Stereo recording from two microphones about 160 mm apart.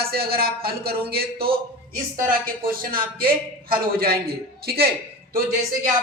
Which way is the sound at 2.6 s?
65° right (ahead or behind).